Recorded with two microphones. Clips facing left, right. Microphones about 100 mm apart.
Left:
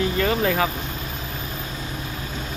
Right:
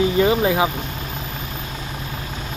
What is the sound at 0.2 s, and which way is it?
Speech, 15° right (ahead or behind).